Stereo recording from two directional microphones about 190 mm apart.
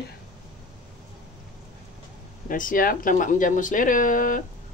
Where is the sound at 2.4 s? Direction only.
45° left (ahead or behind).